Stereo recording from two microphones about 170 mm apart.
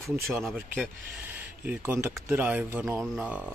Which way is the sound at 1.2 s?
10° right (ahead or behind).